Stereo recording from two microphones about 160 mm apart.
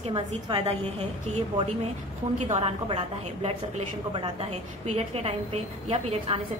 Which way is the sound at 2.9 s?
35° right (ahead or behind).